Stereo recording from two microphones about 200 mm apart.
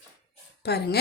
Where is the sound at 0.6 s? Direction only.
55° left (ahead or behind).